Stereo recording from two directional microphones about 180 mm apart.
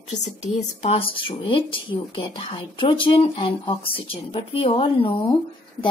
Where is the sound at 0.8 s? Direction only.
30° left (ahead or behind).